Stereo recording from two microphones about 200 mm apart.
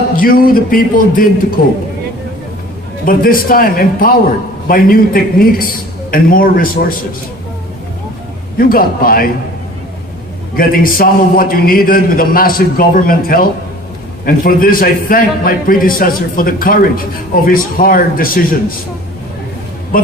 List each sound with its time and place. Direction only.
0.2 s a man's voice: 45° left (ahead or behind)
3.1 s a man's voice: 45° left (ahead or behind)
8.5 s a man's voice: 45° left (ahead or behind)
10.6 s a man's voice: 45° left (ahead or behind)
19.9 s a man's voice: 45° left (ahead or behind)